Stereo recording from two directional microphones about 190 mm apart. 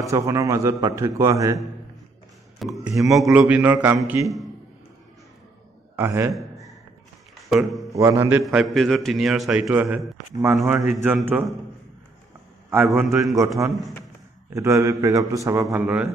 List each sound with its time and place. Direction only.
0.0 s a man's voice: 15° right (ahead or behind)
2.6 s a man's voice: centre (ahead or behind)
5.9 s a man's voice: 15° right (ahead or behind)
7.4 s speech: centre (ahead or behind)
7.9 s a man's voice: 15° right (ahead or behind)
8.5 s a man's voice: centre (ahead or behind)
10.3 s a man's voice: 15° right (ahead or behind)
12.6 s a man's voice: 15° right (ahead or behind)
14.5 s a man's voice: 15° right (ahead or behind)